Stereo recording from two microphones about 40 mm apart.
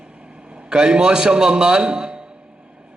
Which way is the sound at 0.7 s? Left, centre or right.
Right.